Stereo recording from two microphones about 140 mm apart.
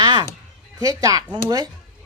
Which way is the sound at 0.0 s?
30° right (ahead or behind).